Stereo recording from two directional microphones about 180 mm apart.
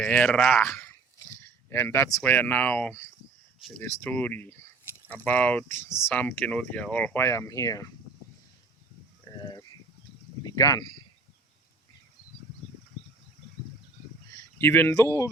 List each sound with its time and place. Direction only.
0.0 s speech: 5° left (ahead or behind)
9.2 s a sound: 25° left (ahead or behind)
10.4 s speech: 20° left (ahead or behind)
14.3 s speech: 10° left (ahead or behind)